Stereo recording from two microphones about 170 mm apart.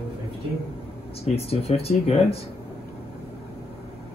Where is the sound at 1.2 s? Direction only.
35° left (ahead or behind).